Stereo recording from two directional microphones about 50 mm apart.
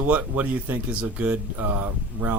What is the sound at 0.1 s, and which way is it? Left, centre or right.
Speech, right.